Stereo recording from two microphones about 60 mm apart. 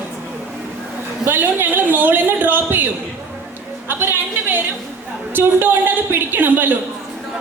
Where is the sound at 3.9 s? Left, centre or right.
Right.